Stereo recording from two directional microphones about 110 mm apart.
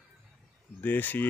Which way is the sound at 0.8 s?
15° left (ahead or behind).